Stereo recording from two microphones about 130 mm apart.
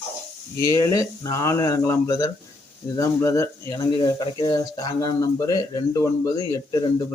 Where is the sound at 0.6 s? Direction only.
25° left (ahead or behind).